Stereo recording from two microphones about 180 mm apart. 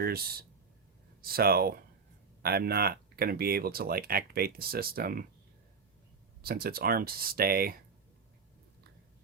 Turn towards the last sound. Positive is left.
turn(degrees=-55)  # may be behind; listen again after turning